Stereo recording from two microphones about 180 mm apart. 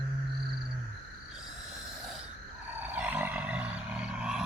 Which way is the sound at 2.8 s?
10° right (ahead or behind).